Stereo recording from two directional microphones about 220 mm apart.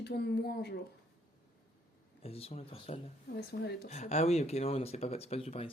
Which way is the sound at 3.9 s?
30° left (ahead or behind).